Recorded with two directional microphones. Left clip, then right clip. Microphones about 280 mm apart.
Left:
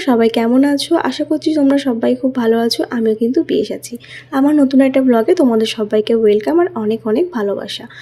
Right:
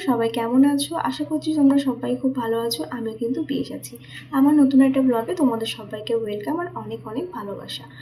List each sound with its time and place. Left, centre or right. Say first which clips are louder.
0.0 s speech: left 9 dB; left